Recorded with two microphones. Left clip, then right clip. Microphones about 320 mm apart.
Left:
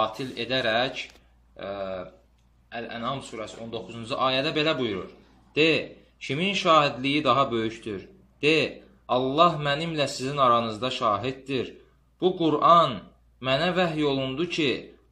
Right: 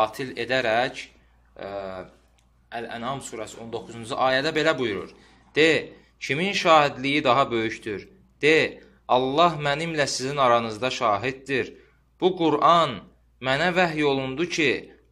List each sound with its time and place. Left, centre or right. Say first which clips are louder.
0.0 s a man's voice: right 3 dB; right